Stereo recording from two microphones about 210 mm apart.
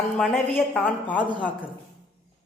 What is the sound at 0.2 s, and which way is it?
A woman's voice, 5° left (ahead or behind).